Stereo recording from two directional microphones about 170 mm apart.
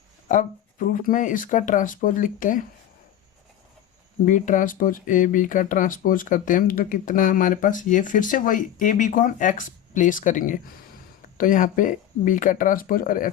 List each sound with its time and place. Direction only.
0.3 s speech: 50° left (ahead or behind)
4.3 s speech: 50° left (ahead or behind)